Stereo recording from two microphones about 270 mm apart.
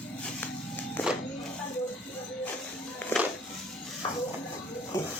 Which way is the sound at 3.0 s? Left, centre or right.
Centre.